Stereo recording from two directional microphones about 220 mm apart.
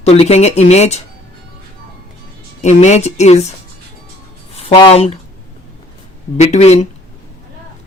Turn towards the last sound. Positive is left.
turn(degrees=30)  # may be behind; listen again after turning